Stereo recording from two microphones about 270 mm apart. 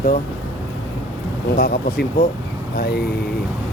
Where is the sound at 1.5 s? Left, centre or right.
Left.